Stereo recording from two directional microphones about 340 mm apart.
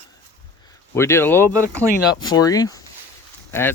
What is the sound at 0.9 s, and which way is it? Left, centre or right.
Speech, centre.